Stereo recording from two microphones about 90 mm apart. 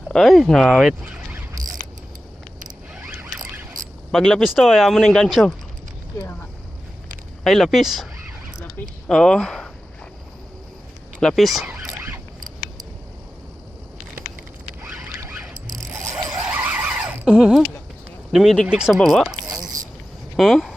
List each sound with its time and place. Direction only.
0.1 s speech: 5° left (ahead or behind)
1.0 s a sound: 15° right (ahead or behind)
3.1 s zipper: 20° right (ahead or behind)
4.1 s speech: 5° left (ahead or behind)
7.4 s speech: centre (ahead or behind)
9.0 s speech: 5° left (ahead or behind)
11.2 s speech: centre (ahead or behind)
11.6 s zipper: 10° right (ahead or behind)
15.3 s mechanisms: 10° right (ahead or behind)
16.4 s a sound: 15° right (ahead or behind)
18.3 s speech: centre (ahead or behind)
18.7 s a sound: 10° right (ahead or behind)
18.9 s speech: 5° left (ahead or behind)
20.3 s speech: centre (ahead or behind)